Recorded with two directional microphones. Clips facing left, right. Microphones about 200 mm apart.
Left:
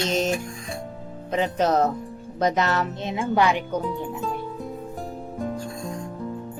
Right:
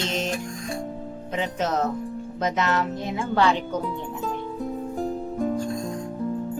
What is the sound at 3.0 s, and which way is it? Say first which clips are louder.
Speech: left 1 dB; 20° left (ahead or behind).